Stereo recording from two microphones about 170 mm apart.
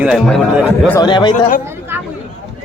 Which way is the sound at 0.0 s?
5° right (ahead or behind).